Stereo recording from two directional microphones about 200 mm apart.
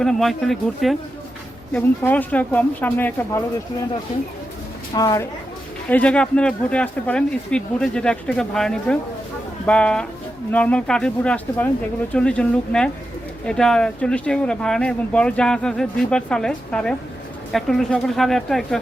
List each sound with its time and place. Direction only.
0.0 s speech: centre (ahead or behind)
4.9 s a woman's voice: 20° left (ahead or behind)
5.9 s speech: 5° left (ahead or behind)